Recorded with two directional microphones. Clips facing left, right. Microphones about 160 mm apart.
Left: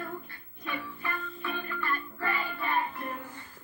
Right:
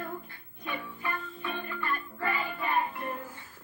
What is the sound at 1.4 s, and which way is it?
Music, 20° right (ahead or behind).